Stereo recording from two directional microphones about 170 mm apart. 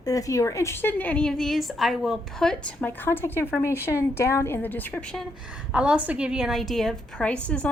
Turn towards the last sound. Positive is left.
turn(degrees=5)  # may be behind; listen again after turning